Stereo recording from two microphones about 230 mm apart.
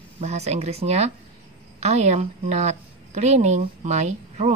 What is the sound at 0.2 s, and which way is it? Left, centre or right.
A woman's voice, right.